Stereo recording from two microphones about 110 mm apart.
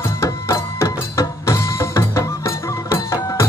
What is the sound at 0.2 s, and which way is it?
Music, 25° left (ahead or behind).